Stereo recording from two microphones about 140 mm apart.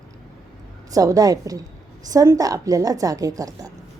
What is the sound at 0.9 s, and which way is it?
A woman's voice, 25° right (ahead or behind).